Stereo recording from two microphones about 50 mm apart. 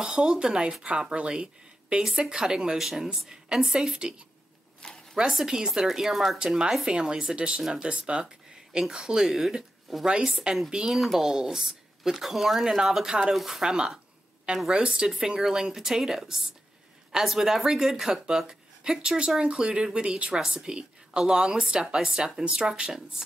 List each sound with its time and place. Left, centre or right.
0.0 s speech: centre
5.1 s speech: centre
6.4 s a woman's voice: centre